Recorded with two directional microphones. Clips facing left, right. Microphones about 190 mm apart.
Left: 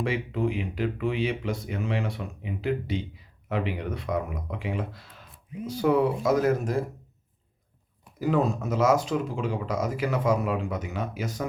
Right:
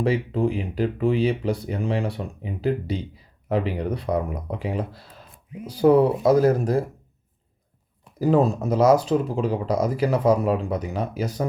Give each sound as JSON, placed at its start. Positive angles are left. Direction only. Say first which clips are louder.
{"t": 0.0, "sound": "speech", "louder": "right 5 dB", "side_deg": -35}
{"t": 8.2, "sound": "speech", "louder": "right 5 dB", "side_deg": -35}